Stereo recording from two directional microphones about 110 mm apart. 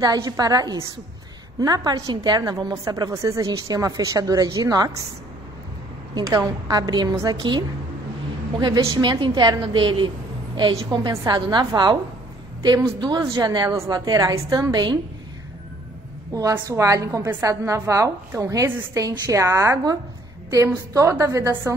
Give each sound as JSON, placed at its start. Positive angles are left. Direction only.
{"t": 0.0, "sound": "a woman's voice", "side_deg": -35}
{"t": 6.2, "sound": "a woman's voice", "side_deg": -30}
{"t": 13.2, "sound": "a woman's voice", "side_deg": -35}
{"t": 14.7, "sound": "a woman's voice", "side_deg": -40}
{"t": 16.3, "sound": "a woman's voice", "side_deg": -30}